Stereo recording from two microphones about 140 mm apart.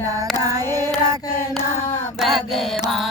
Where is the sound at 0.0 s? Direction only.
25° right (ahead or behind).